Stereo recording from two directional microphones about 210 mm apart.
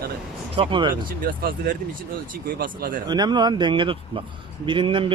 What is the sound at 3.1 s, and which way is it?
A man's voice, 20° right (ahead or behind).